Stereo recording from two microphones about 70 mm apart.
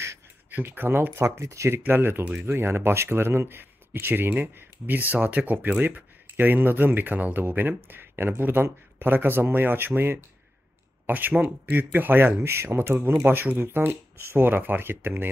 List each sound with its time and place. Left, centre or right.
0.5 s speech: right
1.4 s speech: right
1.9 s speech: right